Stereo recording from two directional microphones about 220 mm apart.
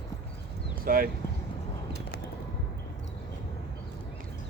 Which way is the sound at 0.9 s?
40° right (ahead or behind).